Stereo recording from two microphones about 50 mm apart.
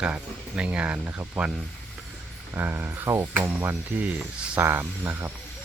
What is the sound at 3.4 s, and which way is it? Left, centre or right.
Speech, right.